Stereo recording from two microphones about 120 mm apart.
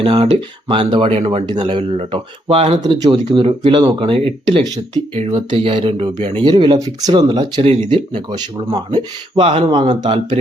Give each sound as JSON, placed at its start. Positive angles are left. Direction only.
{"t": 0.0, "sound": "speech", "side_deg": -50}
{"t": 1.6, "sound": "speech", "side_deg": -50}
{"t": 2.8, "sound": "speech", "side_deg": -40}
{"t": 5.1, "sound": "speech", "side_deg": -60}
{"t": 7.6, "sound": "speech", "side_deg": -60}
{"t": 9.4, "sound": "speech", "side_deg": -55}
{"t": 9.6, "sound": "speech", "side_deg": -40}